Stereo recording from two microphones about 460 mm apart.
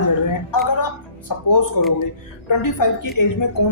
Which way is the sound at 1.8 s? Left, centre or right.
Left.